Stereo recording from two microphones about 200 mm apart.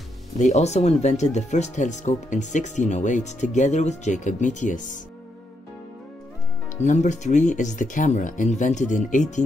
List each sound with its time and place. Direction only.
0.4 s speech: 35° left (ahead or behind)
6.8 s speech: 35° left (ahead or behind)